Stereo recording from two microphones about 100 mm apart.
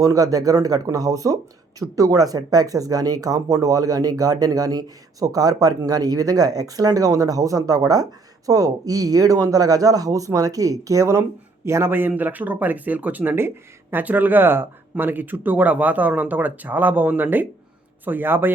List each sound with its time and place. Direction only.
0.0 s a man's voice: 35° right (ahead or behind); by 18.5 s 20° right (ahead or behind)